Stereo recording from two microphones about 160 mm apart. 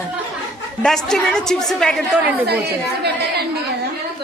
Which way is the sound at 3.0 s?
90° right.